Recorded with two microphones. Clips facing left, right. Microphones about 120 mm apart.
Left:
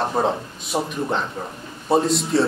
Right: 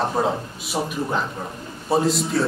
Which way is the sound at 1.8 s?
Centre (ahead or behind).